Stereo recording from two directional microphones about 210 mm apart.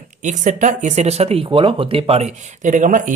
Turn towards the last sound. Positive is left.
turn(degrees=-40)  # may be behind; listen again after turning